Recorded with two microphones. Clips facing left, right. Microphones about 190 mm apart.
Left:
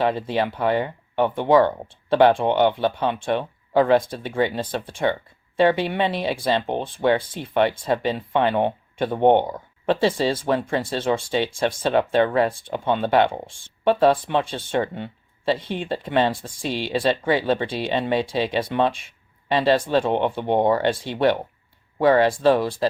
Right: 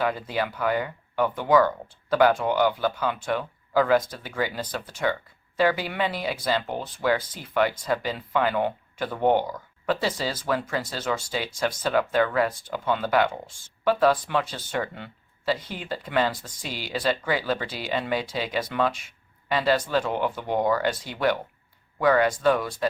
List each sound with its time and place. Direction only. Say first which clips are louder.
0.0 s speech: left 5 dB; 25° left (ahead or behind)